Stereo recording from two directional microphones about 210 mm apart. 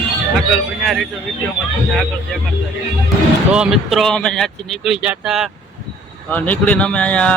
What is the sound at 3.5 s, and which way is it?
Speech, 5° right (ahead or behind).